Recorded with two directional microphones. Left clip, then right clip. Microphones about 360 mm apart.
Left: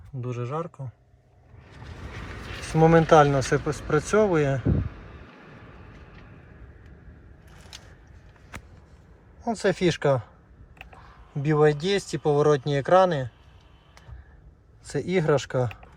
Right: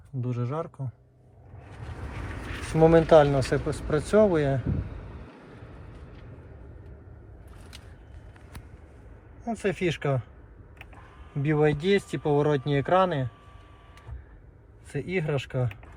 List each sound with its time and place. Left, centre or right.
0.2 s speech: centre
2.7 s speech: centre
9.4 s speech: centre
11.4 s speech: centre
14.8 s speech: centre